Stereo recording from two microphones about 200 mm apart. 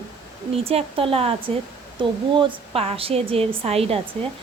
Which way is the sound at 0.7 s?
30° right (ahead or behind).